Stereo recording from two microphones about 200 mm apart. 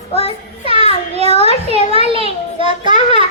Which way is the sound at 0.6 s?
25° right (ahead or behind).